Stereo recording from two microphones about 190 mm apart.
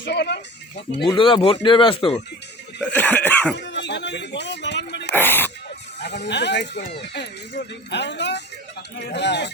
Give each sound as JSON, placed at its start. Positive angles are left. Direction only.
{"t": 0.0, "sound": "speech", "side_deg": 60}
{"t": 1.0, "sound": "speech", "side_deg": 25}
{"t": 2.9, "sound": "cough", "side_deg": 10}
{"t": 3.5, "sound": "speech", "side_deg": 65}
{"t": 5.1, "sound": "a sound", "side_deg": 10}
{"t": 6.0, "sound": "speech", "side_deg": 65}